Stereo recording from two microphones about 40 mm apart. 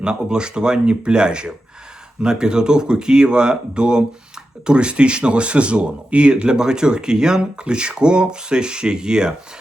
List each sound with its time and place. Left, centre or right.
0.0 s speech: right